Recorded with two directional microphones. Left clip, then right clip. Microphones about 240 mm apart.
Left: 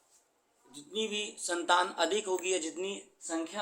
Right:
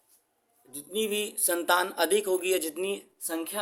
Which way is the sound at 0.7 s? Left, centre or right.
Right.